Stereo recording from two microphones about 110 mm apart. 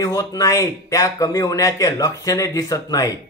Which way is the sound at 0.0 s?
30° left (ahead or behind).